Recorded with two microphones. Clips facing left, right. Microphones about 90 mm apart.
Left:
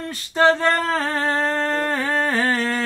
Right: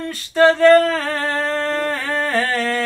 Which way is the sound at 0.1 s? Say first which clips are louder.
Right 3 dB; 20° left (ahead or behind).